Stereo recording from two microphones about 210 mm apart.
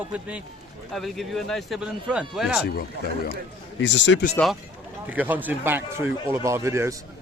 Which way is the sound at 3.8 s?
55° left (ahead or behind).